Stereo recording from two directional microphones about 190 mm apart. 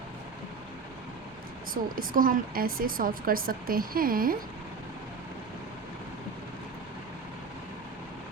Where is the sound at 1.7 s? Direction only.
50° right (ahead or behind).